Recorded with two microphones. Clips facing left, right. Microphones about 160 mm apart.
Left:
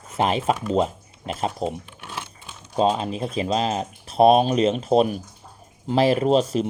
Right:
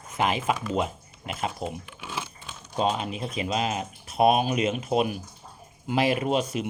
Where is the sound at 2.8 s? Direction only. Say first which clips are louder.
Left 5 dB; 35° left (ahead or behind).